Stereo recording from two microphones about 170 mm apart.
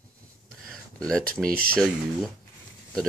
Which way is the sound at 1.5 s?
60° right (ahead or behind).